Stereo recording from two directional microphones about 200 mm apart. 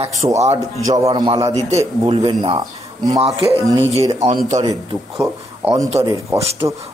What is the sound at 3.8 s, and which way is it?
Speech, 30° right (ahead or behind).